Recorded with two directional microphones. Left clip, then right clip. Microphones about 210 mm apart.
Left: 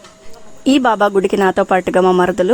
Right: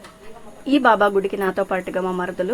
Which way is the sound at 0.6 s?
45° left (ahead or behind).